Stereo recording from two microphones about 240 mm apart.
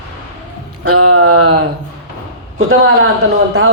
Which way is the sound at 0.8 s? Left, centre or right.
Right.